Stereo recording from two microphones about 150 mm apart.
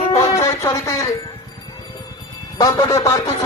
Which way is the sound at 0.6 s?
20° left (ahead or behind).